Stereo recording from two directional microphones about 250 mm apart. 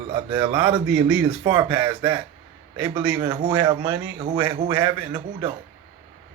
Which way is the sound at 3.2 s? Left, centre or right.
Centre.